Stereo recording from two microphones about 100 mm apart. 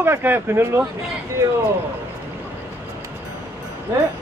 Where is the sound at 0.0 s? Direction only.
25° right (ahead or behind).